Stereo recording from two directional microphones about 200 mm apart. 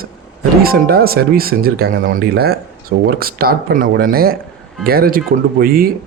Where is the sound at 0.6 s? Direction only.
50° right (ahead or behind).